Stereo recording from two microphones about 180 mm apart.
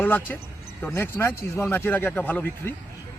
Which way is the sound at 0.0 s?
10° left (ahead or behind).